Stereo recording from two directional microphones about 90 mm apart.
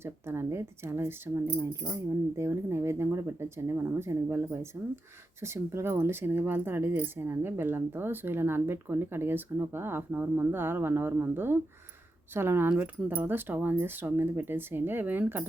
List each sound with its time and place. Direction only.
0.0 s speech: 30° right (ahead or behind)